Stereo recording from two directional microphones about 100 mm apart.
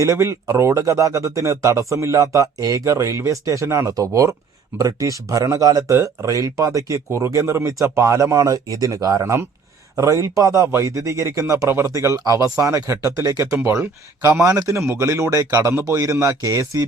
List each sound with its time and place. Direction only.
0.0 s speech: 30° right (ahead or behind)